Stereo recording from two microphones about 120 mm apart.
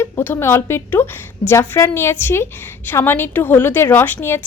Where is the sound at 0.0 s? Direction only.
20° left (ahead or behind).